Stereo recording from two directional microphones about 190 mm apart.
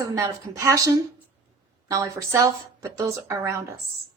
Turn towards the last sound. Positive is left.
turn(degrees=-15)  # may be behind; listen again after turning